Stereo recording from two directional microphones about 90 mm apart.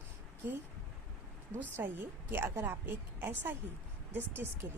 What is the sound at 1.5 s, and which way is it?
A woman's voice, 25° right (ahead or behind).